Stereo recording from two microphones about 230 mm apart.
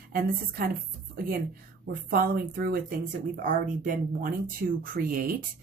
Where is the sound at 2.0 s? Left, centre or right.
Right.